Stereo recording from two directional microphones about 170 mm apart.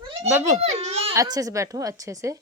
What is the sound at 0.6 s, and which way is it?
Baby laughter, 40° right (ahead or behind).